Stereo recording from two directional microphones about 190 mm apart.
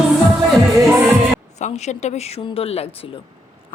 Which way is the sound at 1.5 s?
35° left (ahead or behind).